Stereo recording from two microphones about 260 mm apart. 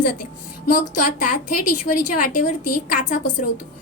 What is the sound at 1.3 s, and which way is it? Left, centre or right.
A woman's voice, left.